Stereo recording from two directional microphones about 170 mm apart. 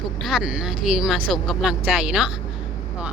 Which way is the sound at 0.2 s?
Centre (ahead or behind).